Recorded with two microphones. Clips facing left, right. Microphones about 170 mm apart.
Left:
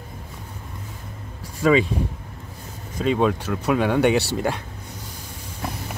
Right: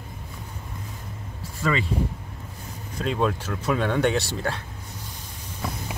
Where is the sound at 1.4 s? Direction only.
15° left (ahead or behind).